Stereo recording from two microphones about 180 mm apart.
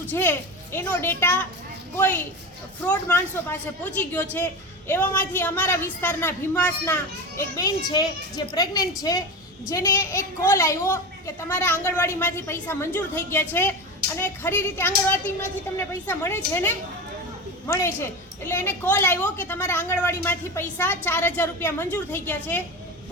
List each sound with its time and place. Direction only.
0.1 s a woman's voice: 10° left (ahead or behind)
2.8 s a woman's voice: 10° left (ahead or behind)